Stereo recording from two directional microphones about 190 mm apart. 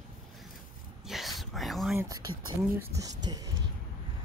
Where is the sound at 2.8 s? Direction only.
15° right (ahead or behind).